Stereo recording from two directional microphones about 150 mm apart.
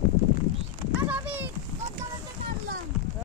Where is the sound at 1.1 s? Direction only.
10° right (ahead or behind).